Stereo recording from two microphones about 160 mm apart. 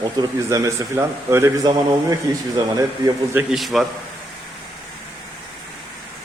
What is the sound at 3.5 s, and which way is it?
Speech, centre (ahead or behind).